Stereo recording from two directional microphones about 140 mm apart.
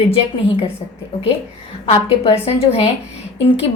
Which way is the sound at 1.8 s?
45° left (ahead or behind).